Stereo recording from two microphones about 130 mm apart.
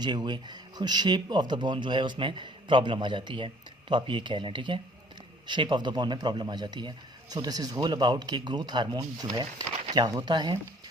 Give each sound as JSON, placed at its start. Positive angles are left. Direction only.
{"t": 0.0, "sound": "speech", "side_deg": -35}